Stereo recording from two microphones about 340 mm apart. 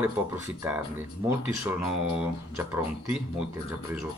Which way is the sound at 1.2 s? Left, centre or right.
Centre.